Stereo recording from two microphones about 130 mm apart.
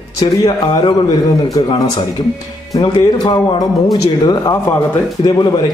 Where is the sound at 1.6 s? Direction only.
30° left (ahead or behind).